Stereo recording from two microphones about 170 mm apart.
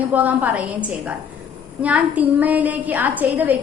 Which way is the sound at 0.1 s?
10° right (ahead or behind).